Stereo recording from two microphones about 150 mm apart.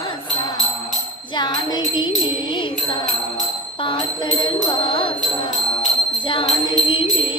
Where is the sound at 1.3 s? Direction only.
30° left (ahead or behind).